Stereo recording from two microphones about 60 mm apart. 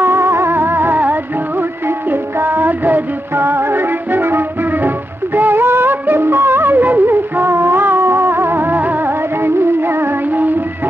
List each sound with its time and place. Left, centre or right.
0.0 s music: right